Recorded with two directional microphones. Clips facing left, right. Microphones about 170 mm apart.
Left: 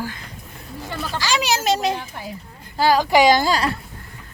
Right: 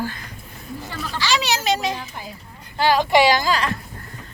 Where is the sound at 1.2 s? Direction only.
45° left (ahead or behind).